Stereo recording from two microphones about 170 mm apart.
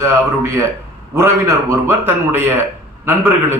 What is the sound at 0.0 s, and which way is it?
A man's voice, 15° right (ahead or behind).